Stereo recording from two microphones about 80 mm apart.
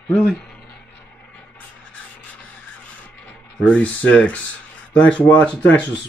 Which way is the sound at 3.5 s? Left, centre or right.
Centre.